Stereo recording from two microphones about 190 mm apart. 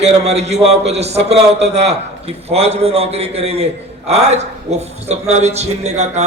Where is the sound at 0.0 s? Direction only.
35° right (ahead or behind).